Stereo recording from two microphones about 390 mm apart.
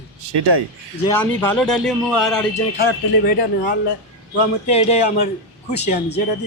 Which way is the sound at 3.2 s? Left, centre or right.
Left.